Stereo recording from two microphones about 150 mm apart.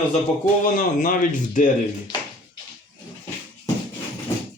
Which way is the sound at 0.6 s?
65° left (ahead or behind).